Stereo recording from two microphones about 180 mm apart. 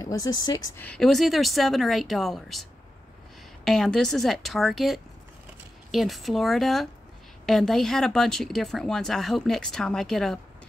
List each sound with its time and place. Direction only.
0.0 s speech: 20° left (ahead or behind)
0.7 s speech: 5° left (ahead or behind)
3.6 s speech: centre (ahead or behind)